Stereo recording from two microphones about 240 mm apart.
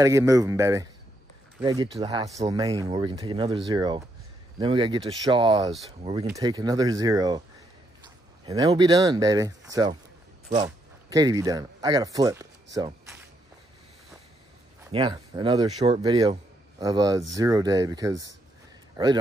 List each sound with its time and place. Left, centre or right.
0.0 s speech: centre
8.5 s speech: centre
12.7 s a sound: centre
14.9 s speech: centre